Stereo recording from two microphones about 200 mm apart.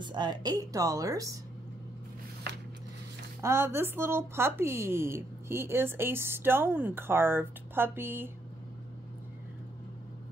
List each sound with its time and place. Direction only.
0.0 s a woman's voice: 20° right (ahead or behind)
3.3 s a woman's voice: 15° right (ahead or behind)